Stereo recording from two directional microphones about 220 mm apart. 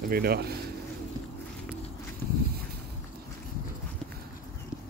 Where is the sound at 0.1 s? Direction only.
45° right (ahead or behind).